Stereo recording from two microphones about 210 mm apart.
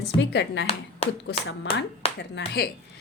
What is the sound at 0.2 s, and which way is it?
Speech, 55° left (ahead or behind).